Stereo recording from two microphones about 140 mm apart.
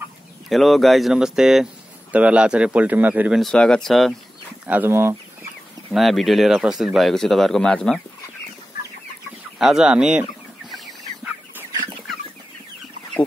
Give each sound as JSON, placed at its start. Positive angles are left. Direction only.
{"t": 0.5, "sound": "a man's voice", "side_deg": 0}
{"t": 3.3, "sound": "speech", "side_deg": 5}
{"t": 4.6, "sound": "a man's voice", "side_deg": -15}
{"t": 5.9, "sound": "speech", "side_deg": 0}
{"t": 9.6, "sound": "speech", "side_deg": -5}